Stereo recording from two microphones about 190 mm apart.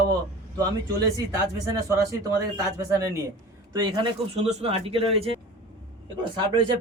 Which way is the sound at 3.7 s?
25° right (ahead or behind).